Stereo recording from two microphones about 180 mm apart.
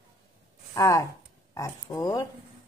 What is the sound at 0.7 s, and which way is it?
Speech, 20° left (ahead or behind).